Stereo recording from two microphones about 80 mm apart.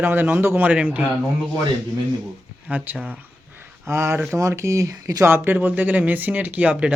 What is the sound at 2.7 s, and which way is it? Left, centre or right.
Speech, centre.